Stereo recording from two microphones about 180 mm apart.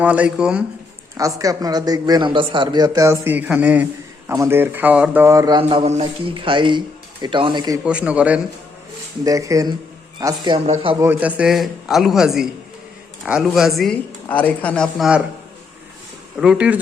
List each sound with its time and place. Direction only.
0.0 s speech: 5° right (ahead or behind)
1.1 s a man's voice: 20° right (ahead or behind)
5.6 s a man's voice: 35° right (ahead or behind)
7.9 s speech: 5° right (ahead or behind)
9.2 s a man's voice: 20° right (ahead or behind)
11.0 s speech: 10° right (ahead or behind)
16.4 s speech: 5° right (ahead or behind)